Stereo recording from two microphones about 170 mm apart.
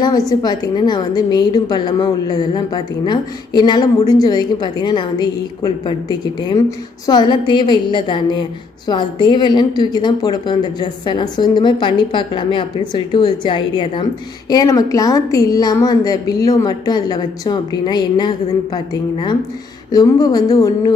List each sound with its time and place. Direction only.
0.3 s a woman's voice: 25° left (ahead or behind)